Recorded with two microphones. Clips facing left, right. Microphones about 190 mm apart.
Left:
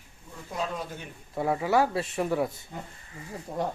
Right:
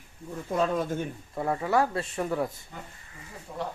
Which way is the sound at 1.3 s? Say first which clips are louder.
Left 1 dB; 5° left (ahead or behind).